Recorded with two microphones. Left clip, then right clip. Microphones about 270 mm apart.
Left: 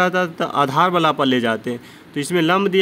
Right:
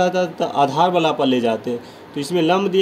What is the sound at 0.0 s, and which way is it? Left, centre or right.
Speech, left.